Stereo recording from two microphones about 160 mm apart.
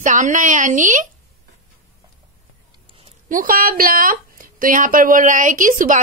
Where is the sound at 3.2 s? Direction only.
60° right (ahead or behind).